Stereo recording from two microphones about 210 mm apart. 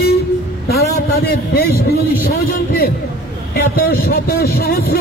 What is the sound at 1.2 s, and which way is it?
Speech, 50° left (ahead or behind).